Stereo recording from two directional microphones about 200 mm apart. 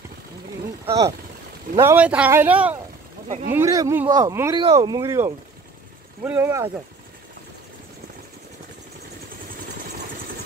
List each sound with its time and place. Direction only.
0.8 s speech: 15° right (ahead or behind)